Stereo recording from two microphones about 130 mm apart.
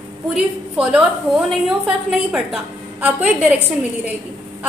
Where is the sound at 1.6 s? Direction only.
5° right (ahead or behind).